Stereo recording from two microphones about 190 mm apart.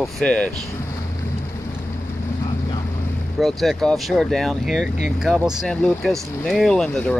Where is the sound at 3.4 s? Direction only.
Centre (ahead or behind).